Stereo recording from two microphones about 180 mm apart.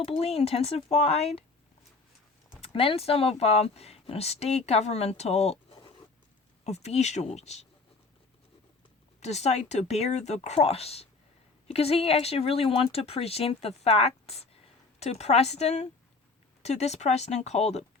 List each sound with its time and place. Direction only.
0.0 s speech: 35° left (ahead or behind)
2.6 s speech: 30° left (ahead or behind)
9.2 s speech: 35° left (ahead or behind)